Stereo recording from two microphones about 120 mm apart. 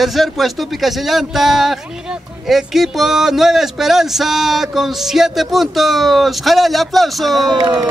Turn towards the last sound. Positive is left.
turn(degrees=-40)  # may be behind; listen again after turning